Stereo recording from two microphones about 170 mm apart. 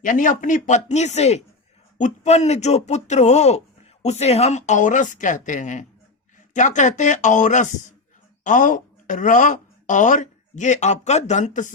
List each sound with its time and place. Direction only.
0.0 s speech: 50° left (ahead or behind)